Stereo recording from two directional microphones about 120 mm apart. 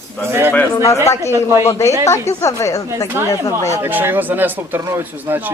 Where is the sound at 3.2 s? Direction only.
20° right (ahead or behind).